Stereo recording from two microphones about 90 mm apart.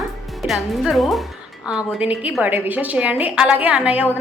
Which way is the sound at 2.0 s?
15° right (ahead or behind).